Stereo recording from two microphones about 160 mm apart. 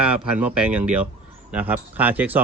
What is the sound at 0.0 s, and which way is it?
A man's voice, 10° right (ahead or behind).